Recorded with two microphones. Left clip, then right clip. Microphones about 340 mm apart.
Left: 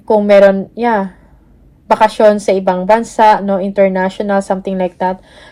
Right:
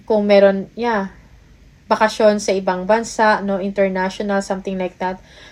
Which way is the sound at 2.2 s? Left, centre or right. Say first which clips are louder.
Left 6 dB; left.